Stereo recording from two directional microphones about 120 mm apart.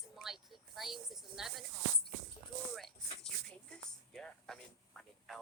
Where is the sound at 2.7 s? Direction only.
5° left (ahead or behind).